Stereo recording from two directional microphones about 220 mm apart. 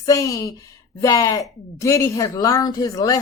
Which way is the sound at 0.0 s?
15° left (ahead or behind).